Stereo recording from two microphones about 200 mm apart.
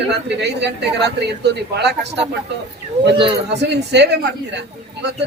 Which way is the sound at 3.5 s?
60° right (ahead or behind).